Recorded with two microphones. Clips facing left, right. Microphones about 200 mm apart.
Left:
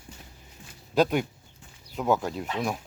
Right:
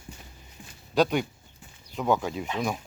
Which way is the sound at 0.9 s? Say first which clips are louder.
Even; 5° left (ahead or behind).